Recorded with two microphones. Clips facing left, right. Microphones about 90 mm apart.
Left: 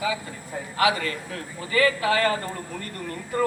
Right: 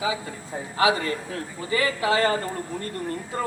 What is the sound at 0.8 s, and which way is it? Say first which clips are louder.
Speech: right 1 dB; 25° right (ahead or behind).